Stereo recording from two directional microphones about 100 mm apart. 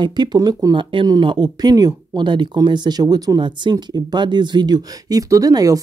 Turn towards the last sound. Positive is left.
turn(degrees=-35)  # may be behind; listen again after turning